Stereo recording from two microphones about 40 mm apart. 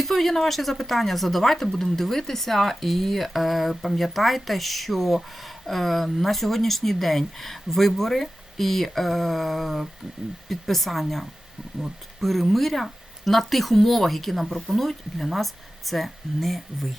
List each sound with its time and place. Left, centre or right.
0.0 s speech: centre